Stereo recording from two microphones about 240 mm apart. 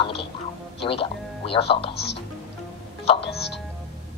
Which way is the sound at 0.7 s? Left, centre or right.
Left.